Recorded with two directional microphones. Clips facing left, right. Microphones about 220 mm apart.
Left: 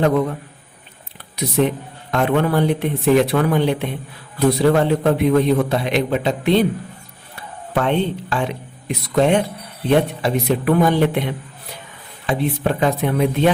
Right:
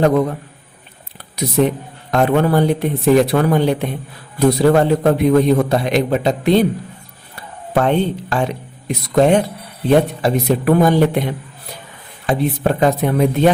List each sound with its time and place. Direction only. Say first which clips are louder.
1.4 s a man's voice: right 2 dB; 40° right (ahead or behind)
7.7 s a man's voice: right 3 dB; 40° right (ahead or behind)
12.2 s speech: right 3 dB; 40° right (ahead or behind)